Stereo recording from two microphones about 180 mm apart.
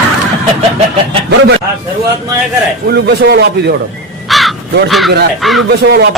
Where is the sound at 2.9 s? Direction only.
65° right (ahead or behind).